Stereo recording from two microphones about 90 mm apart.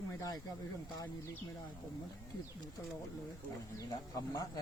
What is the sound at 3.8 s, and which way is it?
Speech, 40° left (ahead or behind).